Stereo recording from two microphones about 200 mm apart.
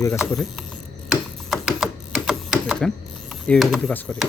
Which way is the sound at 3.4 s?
Centre (ahead or behind).